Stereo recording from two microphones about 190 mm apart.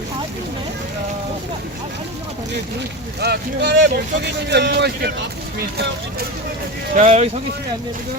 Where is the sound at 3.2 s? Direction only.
60° right (ahead or behind).